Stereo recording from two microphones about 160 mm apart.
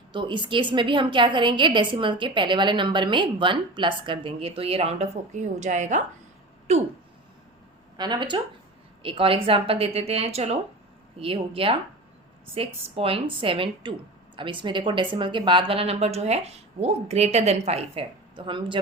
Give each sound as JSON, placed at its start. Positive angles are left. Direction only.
{"t": 0.1, "sound": "a woman's voice", "side_deg": -30}
{"t": 7.9, "sound": "a woman's voice", "side_deg": -25}